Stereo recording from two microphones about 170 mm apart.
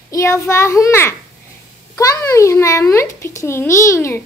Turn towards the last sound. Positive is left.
turn(degrees=15)  # may be behind; listen again after turning